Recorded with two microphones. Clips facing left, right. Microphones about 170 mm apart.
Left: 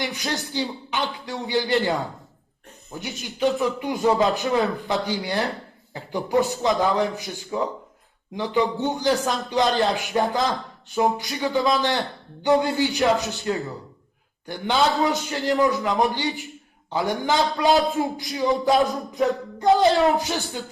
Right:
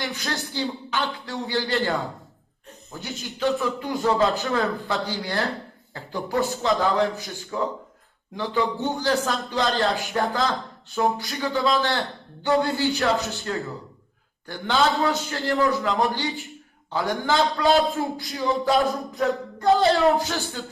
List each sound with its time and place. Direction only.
0.0 s a man's voice: 20° left (ahead or behind)